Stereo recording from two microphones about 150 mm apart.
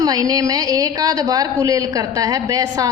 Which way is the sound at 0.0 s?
25° right (ahead or behind).